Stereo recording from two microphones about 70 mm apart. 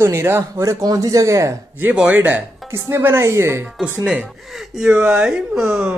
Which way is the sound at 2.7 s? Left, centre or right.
Right.